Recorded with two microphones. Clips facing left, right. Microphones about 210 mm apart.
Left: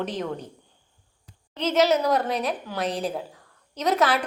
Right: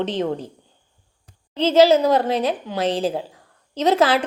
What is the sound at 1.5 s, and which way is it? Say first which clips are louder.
A woman's voice: right 7 dB; 30° right (ahead or behind).